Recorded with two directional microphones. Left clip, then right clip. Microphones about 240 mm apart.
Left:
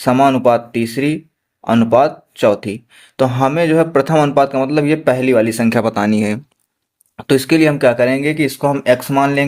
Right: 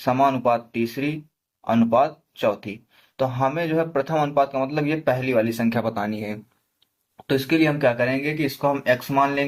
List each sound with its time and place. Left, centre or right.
0.0 s speech: left